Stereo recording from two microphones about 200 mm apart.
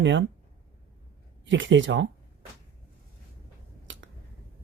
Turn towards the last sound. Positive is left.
turn(degrees=-70)  # may be behind; listen again after turning